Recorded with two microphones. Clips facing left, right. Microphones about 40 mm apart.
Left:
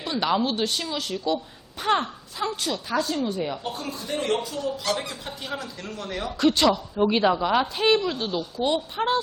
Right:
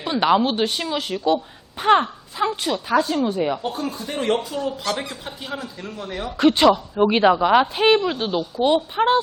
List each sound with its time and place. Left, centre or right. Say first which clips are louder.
0.0 s a woman's voice: right 6 dB; right
3.7 s a woman's voice: right 3 dB; centre
4.9 s speech: right 2 dB; centre
6.4 s a woman's voice: right 5 dB; right